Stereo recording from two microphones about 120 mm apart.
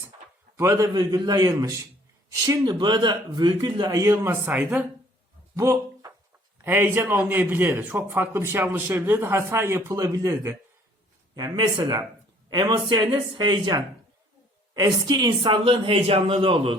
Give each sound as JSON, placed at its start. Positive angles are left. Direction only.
{"t": 0.5, "sound": "a man's voice", "side_deg": -25}
{"t": 5.5, "sound": "a sound", "side_deg": -25}
{"t": 6.7, "sound": "a man's voice", "side_deg": -20}
{"t": 11.3, "sound": "speech", "side_deg": -35}
{"t": 15.6, "sound": "a man's voice", "side_deg": -50}